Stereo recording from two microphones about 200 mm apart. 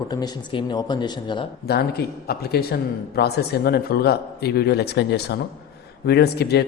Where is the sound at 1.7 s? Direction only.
50° left (ahead or behind).